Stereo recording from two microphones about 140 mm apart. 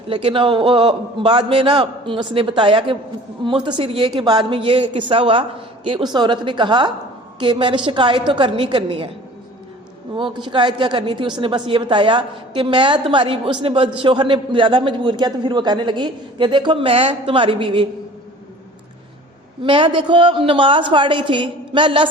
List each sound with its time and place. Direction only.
0.1 s a woman's voice: 40° right (ahead or behind)
10.2 s a woman's voice: 35° right (ahead or behind)
19.6 s a woman's voice: 35° right (ahead or behind)